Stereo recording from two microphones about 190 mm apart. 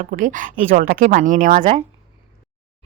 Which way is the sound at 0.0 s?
45° right (ahead or behind).